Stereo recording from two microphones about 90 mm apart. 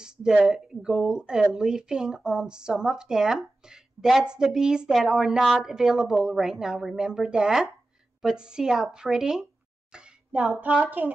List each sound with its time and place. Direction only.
0.0 s speech: 10° right (ahead or behind)